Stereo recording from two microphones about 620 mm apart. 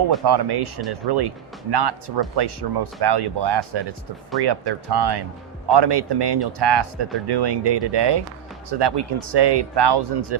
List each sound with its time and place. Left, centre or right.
0.3 s speech: right